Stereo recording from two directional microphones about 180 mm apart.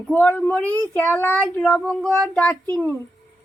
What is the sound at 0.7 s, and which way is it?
Speech, 15° right (ahead or behind).